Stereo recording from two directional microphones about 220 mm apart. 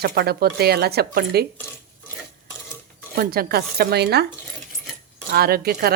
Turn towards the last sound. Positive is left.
turn(degrees=-45)  # may be behind; listen again after turning